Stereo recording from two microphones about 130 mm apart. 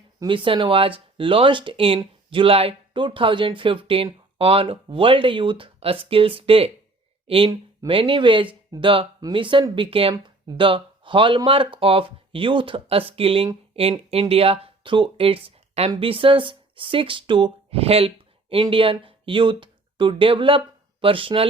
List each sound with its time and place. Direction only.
0.3 s speech: 40° right (ahead or behind)